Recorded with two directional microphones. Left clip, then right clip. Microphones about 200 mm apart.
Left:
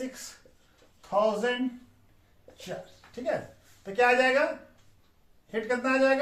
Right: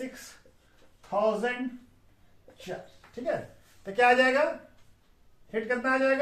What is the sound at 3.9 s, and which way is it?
Speech, 35° right (ahead or behind).